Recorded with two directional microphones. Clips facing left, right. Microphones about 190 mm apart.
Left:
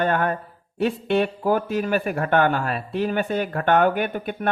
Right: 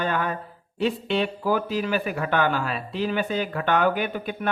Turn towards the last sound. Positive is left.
turn(degrees=50)  # may be behind; listen again after turning